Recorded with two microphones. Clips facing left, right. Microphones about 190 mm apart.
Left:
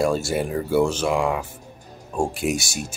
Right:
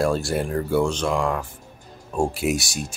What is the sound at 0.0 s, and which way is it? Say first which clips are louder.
Speech: left 1 dB; centre (ahead or behind).